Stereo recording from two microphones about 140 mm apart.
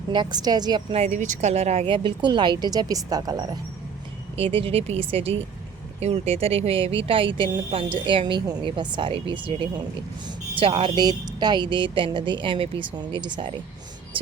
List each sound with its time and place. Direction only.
0.1 s speech: 30° right (ahead or behind)
0.9 s speech: 50° right (ahead or behind); by 3.4 s 25° right (ahead or behind)
4.4 s speech: 40° right (ahead or behind)
10.6 s speech: 40° right (ahead or behind)